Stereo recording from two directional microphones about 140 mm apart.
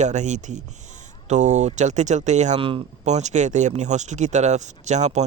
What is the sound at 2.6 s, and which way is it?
Speech, 40° right (ahead or behind).